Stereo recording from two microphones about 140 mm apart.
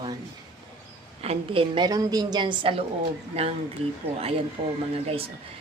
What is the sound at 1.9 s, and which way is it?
Speech, 30° right (ahead or behind).